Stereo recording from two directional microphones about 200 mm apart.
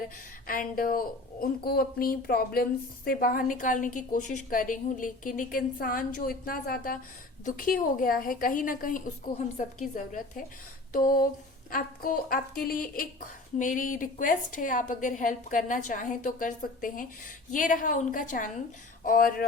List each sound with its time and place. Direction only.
0.4 s a woman's voice: 45° left (ahead or behind)